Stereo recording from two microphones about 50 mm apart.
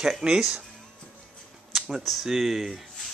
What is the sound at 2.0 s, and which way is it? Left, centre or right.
Speech, centre.